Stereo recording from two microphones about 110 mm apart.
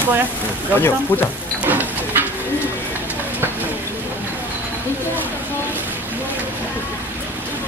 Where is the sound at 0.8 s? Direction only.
20° left (ahead or behind).